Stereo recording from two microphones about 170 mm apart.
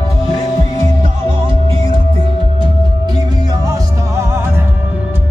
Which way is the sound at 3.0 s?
25° right (ahead or behind).